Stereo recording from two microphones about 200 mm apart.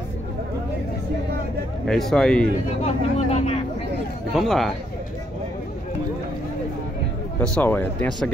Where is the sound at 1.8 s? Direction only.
Centre (ahead or behind).